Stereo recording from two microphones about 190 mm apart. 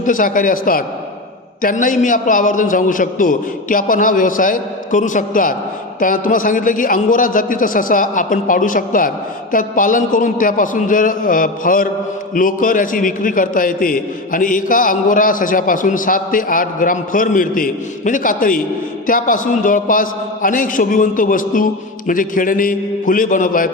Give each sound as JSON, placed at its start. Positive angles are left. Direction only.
{"t": 0.0, "sound": "a man's voice", "side_deg": 45}